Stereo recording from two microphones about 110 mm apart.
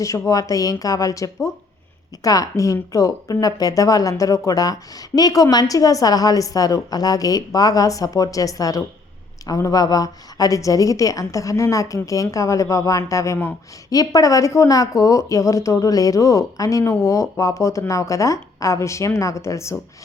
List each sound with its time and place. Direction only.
0.0 s speech: 30° left (ahead or behind)